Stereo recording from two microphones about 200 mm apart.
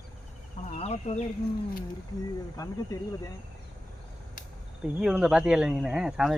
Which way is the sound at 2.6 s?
15° left (ahead or behind).